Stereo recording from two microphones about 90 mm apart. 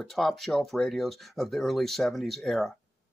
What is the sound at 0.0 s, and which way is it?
Speech, centre (ahead or behind).